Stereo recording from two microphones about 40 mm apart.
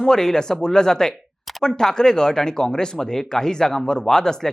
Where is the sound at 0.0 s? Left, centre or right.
Centre.